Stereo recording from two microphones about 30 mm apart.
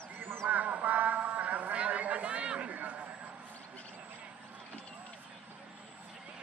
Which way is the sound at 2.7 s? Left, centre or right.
Right.